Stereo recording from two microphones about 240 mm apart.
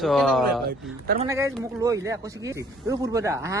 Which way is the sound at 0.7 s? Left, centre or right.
Right.